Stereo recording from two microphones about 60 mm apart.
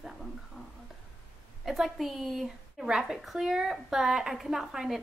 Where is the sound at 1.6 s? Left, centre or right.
Centre.